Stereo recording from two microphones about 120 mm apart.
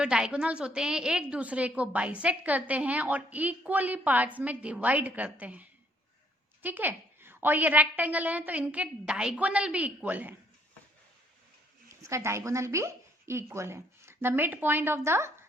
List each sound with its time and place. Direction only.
0.0 s a woman's voice: 5° right (ahead or behind)
12.0 s a woman's voice: 25° right (ahead or behind)